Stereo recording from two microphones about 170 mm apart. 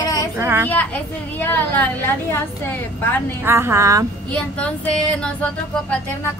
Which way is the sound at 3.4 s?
15° right (ahead or behind).